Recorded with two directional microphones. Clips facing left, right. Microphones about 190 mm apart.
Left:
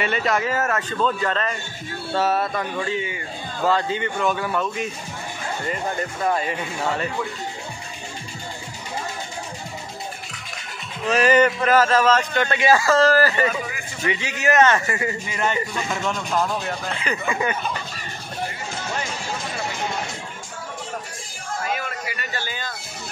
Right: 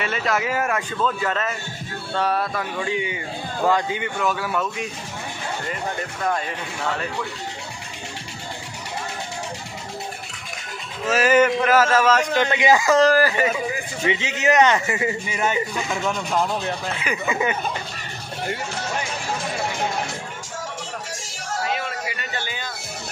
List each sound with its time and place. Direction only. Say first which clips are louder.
0.0 s speech: left 1 dB; centre (ahead or behind)
2.8 s speech: right 1 dB; 15° right (ahead or behind)
6.2 s speech: left 2 dB; 5° left (ahead or behind)
11.1 s speech: even; 5° right (ahead or behind)
21.7 s a sound: right 1 dB; 20° right (ahead or behind)